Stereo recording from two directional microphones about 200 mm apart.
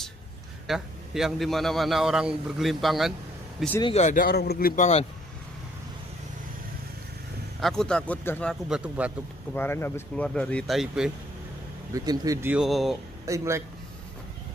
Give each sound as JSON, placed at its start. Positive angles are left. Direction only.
{"t": 0.7, "sound": "a man's voice", "side_deg": 0}
{"t": 3.8, "sound": "speech", "side_deg": 35}
{"t": 7.6, "sound": "a man's voice", "side_deg": 5}
{"t": 8.6, "sound": "a man's voice", "side_deg": -5}
{"t": 9.5, "sound": "speech", "side_deg": 10}
{"t": 11.9, "sound": "speech", "side_deg": -15}
{"t": 13.2, "sound": "speech", "side_deg": -15}